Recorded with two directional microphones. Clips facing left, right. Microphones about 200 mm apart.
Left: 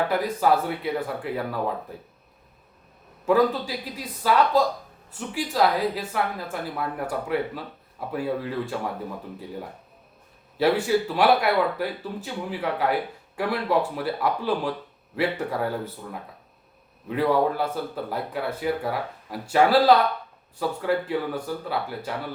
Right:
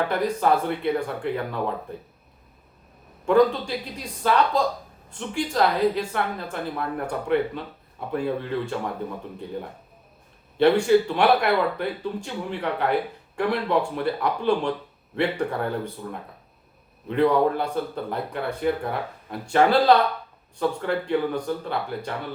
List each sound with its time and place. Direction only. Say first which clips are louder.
0.1 s a woman's voice: even; 5° left (ahead or behind)
3.2 s a woman's voice: right 2 dB; 5° left (ahead or behind)
10.6 s a woman's voice: right 4 dB; 5° left (ahead or behind)
17.1 s a woman's voice: right 2 dB; 5° left (ahead or behind)